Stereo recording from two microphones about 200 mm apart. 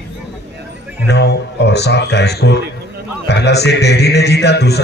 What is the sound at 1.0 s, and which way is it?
A man's voice, 55° left (ahead or behind).